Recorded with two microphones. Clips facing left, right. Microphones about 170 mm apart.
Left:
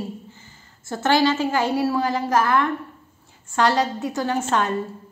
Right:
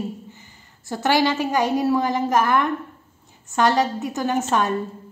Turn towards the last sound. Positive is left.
turn(degrees=-15)  # may be behind; listen again after turning